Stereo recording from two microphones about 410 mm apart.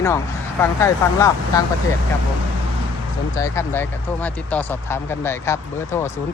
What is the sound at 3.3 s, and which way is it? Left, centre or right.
Speech, centre.